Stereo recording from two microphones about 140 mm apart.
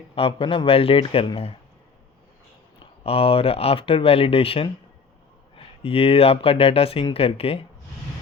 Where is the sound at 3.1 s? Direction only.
45° left (ahead or behind).